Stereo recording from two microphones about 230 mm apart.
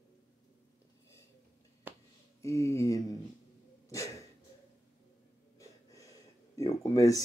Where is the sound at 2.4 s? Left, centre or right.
Centre.